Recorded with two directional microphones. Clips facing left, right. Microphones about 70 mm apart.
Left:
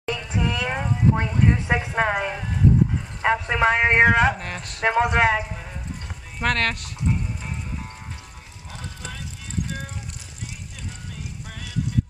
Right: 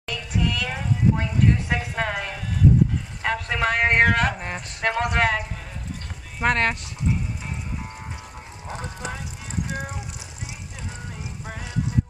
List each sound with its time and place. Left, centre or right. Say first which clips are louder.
0.0 s a sound: left 1 dB; left
4.4 s speech: right 1 dB; centre
4.8 s speech: left 3 dB; centre
6.4 s speech: right 2 dB; centre
8.6 s clip-clop: right 5 dB; right
9.7 s a sound: right 3 dB; centre